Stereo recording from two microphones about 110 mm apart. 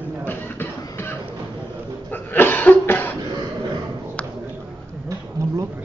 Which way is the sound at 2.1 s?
15° left (ahead or behind).